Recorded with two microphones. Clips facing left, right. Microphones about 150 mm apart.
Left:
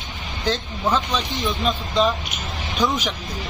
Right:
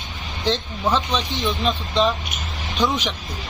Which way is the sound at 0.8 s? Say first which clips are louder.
Even; 5° right (ahead or behind).